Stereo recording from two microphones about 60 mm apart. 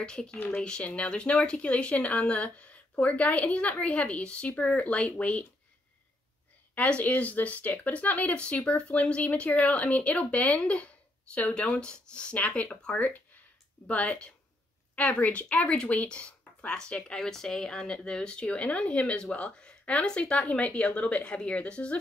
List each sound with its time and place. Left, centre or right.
0.0 s speech: centre
6.7 s speech: left